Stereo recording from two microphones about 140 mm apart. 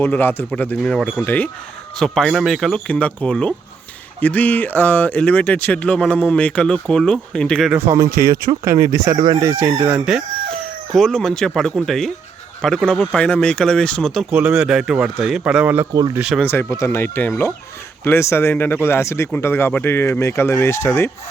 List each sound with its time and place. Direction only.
0.0 s speech: 15° left (ahead or behind)
2.0 s speech: centre (ahead or behind)
7.7 s speech: 20° right (ahead or behind)
8.1 s speech: 90° right
9.1 s speech: 35° right (ahead or behind)
9.5 s speech: 20° right (ahead or behind)
9.8 s speech: 5° right (ahead or behind)
15.9 s speech: 30° right (ahead or behind)
16.4 s speech: 15° left (ahead or behind)